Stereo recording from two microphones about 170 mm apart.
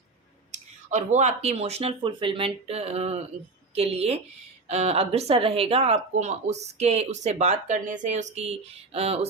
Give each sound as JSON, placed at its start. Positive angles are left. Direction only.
{"t": 0.5, "sound": "speech", "side_deg": -45}